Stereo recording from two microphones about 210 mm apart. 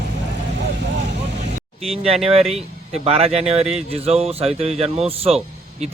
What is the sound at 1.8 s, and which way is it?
Speech, 30° right (ahead or behind).